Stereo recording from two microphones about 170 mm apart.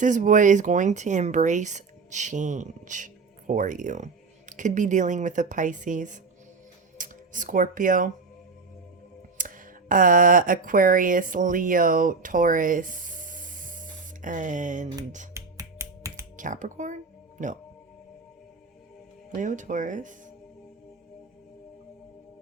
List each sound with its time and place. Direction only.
0.0 s speech: 50° right (ahead or behind)
9.4 s speech: 50° right (ahead or behind)
15.3 s finger snapping: 15° right (ahead or behind)
16.4 s speech: 50° right (ahead or behind)
19.4 s speech: 45° right (ahead or behind)